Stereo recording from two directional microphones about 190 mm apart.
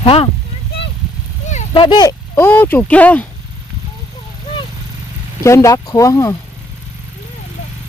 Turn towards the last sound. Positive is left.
turn(degrees=15)  # may be behind; listen again after turning